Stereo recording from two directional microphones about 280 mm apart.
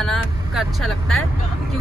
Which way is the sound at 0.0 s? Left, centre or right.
Centre.